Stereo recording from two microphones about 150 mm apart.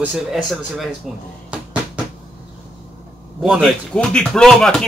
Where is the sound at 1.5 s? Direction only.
10° right (ahead or behind).